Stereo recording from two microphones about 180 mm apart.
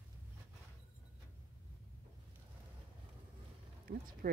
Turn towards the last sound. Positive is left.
turn(degrees=-55)  # may be behind; listen again after turning